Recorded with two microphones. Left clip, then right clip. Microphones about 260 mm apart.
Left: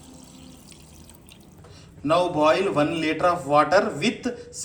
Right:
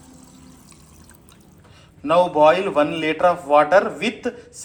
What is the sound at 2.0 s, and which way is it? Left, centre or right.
A man's voice, centre.